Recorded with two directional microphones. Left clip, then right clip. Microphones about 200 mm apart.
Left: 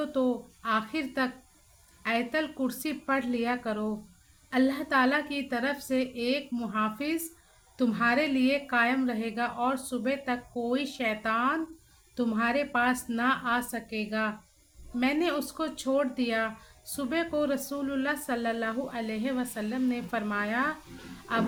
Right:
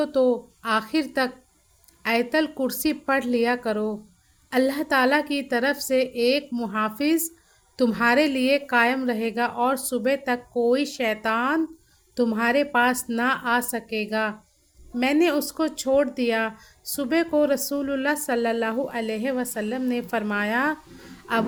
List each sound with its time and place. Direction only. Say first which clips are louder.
0.0 s a woman's voice: right 8 dB; 40° right (ahead or behind)